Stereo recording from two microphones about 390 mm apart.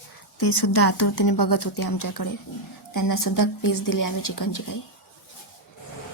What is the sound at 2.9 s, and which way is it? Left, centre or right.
A woman's voice, left.